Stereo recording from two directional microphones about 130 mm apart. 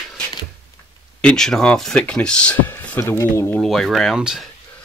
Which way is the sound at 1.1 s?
5° left (ahead or behind).